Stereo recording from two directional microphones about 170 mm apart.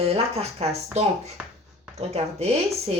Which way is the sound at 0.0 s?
35° right (ahead or behind).